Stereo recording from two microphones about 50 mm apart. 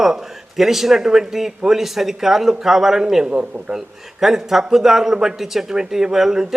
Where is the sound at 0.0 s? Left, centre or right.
Centre.